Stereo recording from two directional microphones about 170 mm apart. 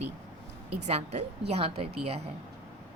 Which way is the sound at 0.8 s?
40° right (ahead or behind).